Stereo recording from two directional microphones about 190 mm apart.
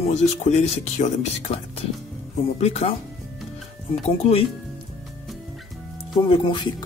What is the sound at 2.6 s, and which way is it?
Speech, 35° left (ahead or behind).